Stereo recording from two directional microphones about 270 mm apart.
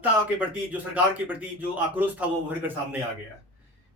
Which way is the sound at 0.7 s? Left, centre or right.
Centre.